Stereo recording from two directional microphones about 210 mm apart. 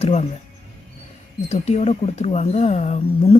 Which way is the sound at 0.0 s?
30° left (ahead or behind).